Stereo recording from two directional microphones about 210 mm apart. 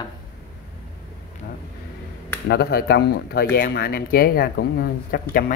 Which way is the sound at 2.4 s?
50° left (ahead or behind).